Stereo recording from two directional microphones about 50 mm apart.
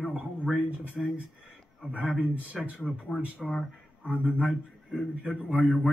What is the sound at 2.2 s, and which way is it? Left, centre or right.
Speech, right.